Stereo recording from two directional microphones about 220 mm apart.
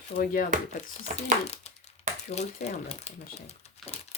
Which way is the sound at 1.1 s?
30° left (ahead or behind).